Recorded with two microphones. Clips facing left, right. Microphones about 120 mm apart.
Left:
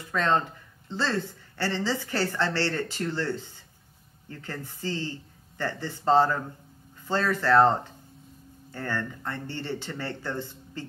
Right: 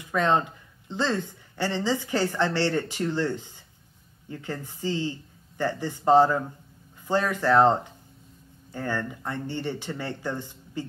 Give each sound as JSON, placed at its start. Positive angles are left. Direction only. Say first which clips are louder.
{"t": 0.1, "sound": "speech", "louder": "right 2 dB", "side_deg": -15}